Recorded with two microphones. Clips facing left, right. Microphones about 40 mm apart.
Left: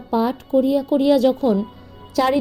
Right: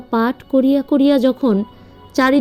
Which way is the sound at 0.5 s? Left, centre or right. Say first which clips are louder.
Right 3 dB; right.